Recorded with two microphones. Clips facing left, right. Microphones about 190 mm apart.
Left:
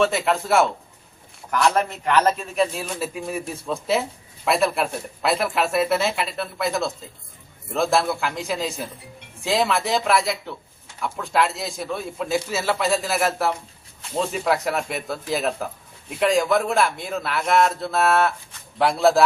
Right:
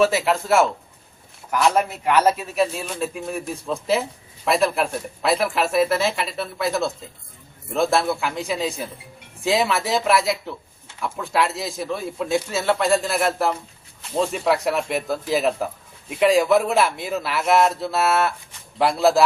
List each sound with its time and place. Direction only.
0.0 s speech: centre (ahead or behind)